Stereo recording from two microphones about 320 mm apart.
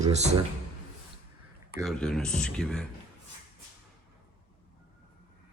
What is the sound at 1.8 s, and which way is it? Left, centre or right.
Speech, centre.